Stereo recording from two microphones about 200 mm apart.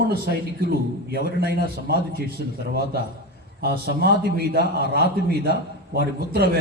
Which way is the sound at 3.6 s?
50° right (ahead or behind).